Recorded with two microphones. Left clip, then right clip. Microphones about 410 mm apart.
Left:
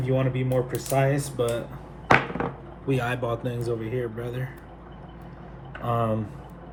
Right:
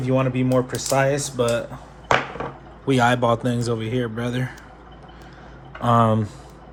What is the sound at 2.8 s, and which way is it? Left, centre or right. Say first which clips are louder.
Speech: right 9 dB; centre.